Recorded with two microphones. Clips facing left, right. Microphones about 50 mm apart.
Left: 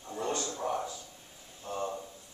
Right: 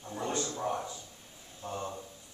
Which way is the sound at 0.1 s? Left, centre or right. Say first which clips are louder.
Even; centre.